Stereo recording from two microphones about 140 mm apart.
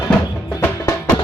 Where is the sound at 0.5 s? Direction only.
20° left (ahead or behind).